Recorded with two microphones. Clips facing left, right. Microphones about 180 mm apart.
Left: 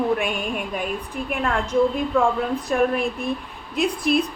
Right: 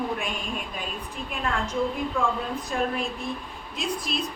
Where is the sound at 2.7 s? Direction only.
60° left (ahead or behind).